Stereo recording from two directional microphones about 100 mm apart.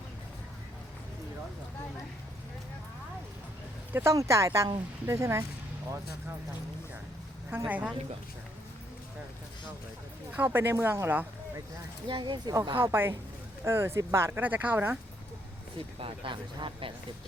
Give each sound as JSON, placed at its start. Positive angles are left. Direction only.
{"t": 3.9, "sound": "speech", "side_deg": -30}
{"t": 7.5, "sound": "a woman's voice", "side_deg": -20}
{"t": 10.3, "sound": "speech", "side_deg": -20}
{"t": 12.0, "sound": "speech", "side_deg": -50}
{"t": 12.7, "sound": "speech", "side_deg": -20}
{"t": 16.0, "sound": "speech", "side_deg": -60}